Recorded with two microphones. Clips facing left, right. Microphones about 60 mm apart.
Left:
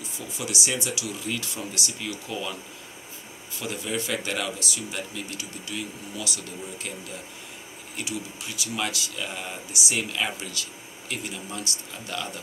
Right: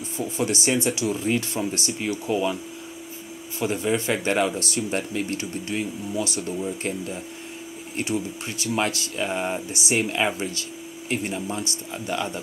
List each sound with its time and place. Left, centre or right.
0.2 s speech: right
3.5 s speech: right
4.6 s speech: right